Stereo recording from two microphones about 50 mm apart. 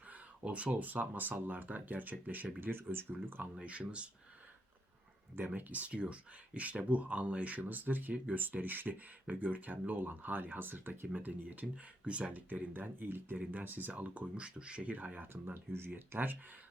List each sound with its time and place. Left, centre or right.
0.1 s speech: right
2.6 s speech: right
3.6 s speech: right
5.5 s speech: right
13.4 s speech: right
14.9 s speech: right
15.3 s speech: right
16.1 s speech: right